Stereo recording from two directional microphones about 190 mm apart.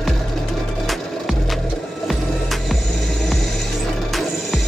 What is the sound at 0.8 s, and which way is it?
Music, centre (ahead or behind).